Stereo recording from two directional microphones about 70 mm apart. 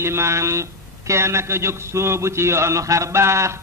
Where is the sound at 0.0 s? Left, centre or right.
Right.